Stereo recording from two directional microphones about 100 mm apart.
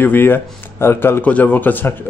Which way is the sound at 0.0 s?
20° left (ahead or behind).